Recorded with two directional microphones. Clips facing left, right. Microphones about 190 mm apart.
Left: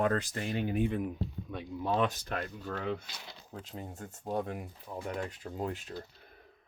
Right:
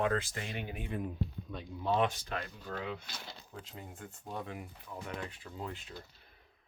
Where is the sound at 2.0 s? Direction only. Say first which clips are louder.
Left 2 dB; 45° left (ahead or behind).